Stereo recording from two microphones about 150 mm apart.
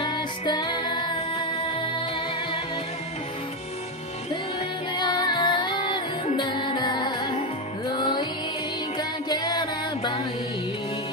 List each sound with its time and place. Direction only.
0.0 s music: 30° left (ahead or behind)
4.9 s music: 30° left (ahead or behind)
8.9 s music: 30° left (ahead or behind)